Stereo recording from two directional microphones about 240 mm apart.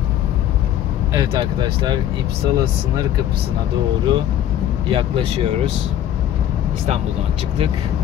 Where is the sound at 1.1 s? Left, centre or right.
Centre.